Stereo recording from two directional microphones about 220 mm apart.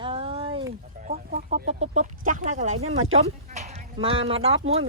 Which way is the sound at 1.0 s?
35° right (ahead or behind).